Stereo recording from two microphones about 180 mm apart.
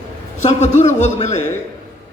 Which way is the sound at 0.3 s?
40° left (ahead or behind).